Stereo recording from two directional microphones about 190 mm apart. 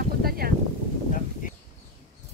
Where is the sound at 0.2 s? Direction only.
55° right (ahead or behind).